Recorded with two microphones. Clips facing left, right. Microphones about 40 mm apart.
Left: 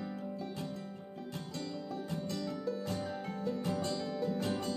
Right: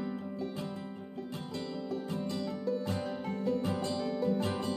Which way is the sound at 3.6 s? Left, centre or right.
Right.